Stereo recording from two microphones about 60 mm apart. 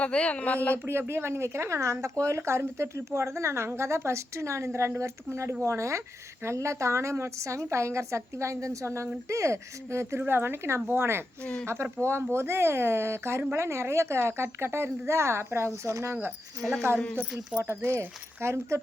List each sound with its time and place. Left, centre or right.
0.0 s speech: centre
0.9 s speech: right
10.2 s a woman's voice: right
16.6 s speech: centre
17.6 s speech: right